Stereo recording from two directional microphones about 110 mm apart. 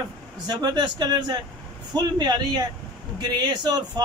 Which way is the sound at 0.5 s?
40° right (ahead or behind).